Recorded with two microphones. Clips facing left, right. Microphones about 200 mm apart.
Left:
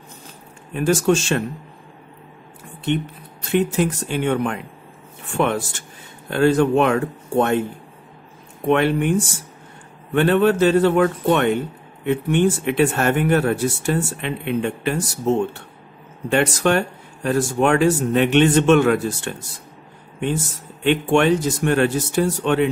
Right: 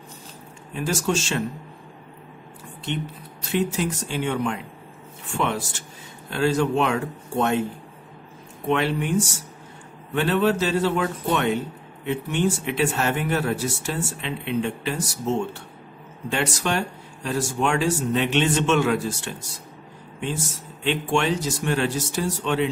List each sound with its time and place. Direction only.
0.7 s a man's voice: 55° left (ahead or behind)
3.5 s a man's voice: 55° left (ahead or behind)
8.6 s a man's voice: 55° left (ahead or behind)
10.1 s a man's voice: 55° left (ahead or behind)
16.3 s a man's voice: 55° left (ahead or behind)
20.8 s a man's voice: 55° left (ahead or behind)